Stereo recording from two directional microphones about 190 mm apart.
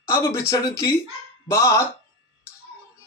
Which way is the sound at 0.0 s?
15° left (ahead or behind).